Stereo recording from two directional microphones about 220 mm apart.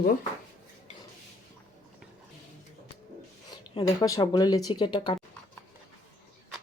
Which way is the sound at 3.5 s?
20° left (ahead or behind).